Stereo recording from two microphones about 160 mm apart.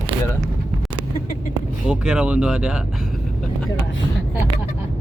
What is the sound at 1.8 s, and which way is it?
Speech, 5° right (ahead or behind).